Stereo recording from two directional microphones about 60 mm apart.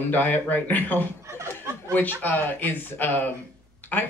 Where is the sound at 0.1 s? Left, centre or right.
Left.